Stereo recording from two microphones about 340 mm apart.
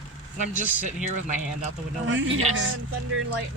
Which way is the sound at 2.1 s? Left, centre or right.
Right.